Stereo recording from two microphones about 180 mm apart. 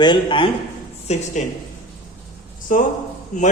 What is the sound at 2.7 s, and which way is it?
Speech, 50° left (ahead or behind).